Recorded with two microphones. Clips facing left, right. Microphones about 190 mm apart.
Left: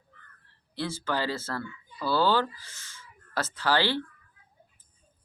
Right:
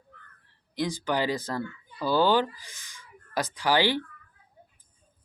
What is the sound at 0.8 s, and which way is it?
Speech, 15° right (ahead or behind).